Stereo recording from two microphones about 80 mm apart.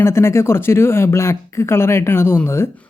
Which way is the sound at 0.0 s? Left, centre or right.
Left.